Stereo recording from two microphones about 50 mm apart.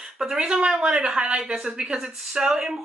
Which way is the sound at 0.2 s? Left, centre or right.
Centre.